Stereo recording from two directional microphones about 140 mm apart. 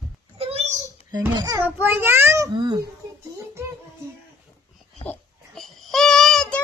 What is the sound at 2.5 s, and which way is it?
Speech, 30° right (ahead or behind).